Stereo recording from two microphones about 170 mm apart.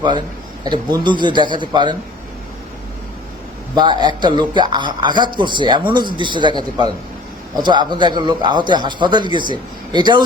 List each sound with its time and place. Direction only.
1.0 s a man's voice: 25° right (ahead or behind)
3.8 s a man's voice: 25° right (ahead or behind)